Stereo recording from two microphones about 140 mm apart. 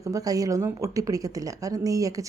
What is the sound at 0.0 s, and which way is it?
Speech, 25° right (ahead or behind).